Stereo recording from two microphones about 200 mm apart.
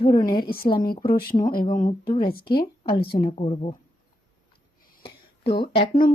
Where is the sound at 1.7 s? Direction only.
40° left (ahead or behind).